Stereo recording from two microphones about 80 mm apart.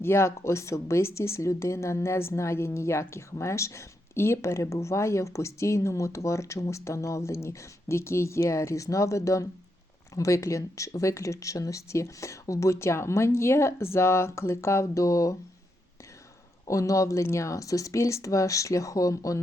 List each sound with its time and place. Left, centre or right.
0.0 s speech: left
16.6 s speech: left